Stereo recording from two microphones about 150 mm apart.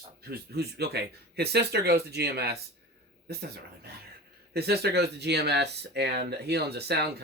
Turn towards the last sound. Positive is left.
turn(degrees=-90)